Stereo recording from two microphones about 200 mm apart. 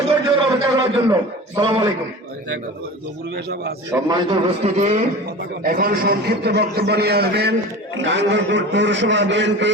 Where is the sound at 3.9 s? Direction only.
20° right (ahead or behind).